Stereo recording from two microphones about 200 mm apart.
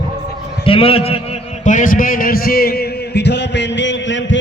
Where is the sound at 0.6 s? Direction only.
25° left (ahead or behind).